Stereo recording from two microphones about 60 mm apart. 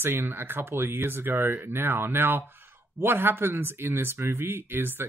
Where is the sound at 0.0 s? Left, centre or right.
Right.